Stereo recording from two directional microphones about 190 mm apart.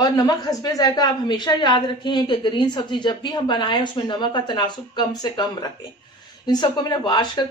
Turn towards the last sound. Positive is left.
turn(degrees=25)  # may be behind; listen again after turning